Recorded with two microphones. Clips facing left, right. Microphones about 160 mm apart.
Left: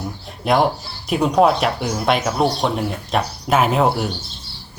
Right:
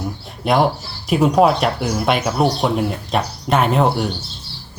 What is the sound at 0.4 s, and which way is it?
Speech, centre (ahead or behind).